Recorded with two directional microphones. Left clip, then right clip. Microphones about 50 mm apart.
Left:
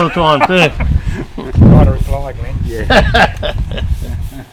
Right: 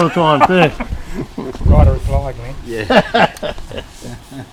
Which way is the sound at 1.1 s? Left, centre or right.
Left.